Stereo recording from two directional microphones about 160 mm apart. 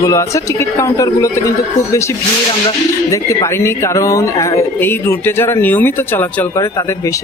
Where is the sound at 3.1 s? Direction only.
20° left (ahead or behind).